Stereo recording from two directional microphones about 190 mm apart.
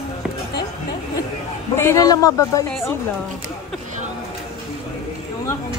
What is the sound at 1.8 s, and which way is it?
Speech, 15° left (ahead or behind).